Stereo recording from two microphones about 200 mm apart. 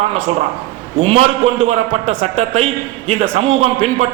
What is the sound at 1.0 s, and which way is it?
A man's voice, 30° right (ahead or behind).